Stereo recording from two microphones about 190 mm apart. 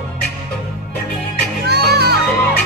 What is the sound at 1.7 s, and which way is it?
Music, 60° right (ahead or behind).